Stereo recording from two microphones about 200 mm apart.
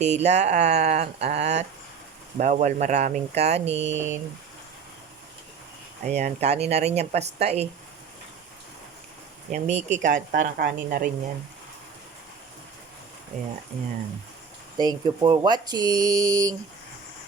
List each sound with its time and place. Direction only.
0.0 s speech: 35° right (ahead or behind)
6.1 s speech: 35° right (ahead or behind)
9.5 s speech: 35° right (ahead or behind)
14.8 s speech: 20° right (ahead or behind)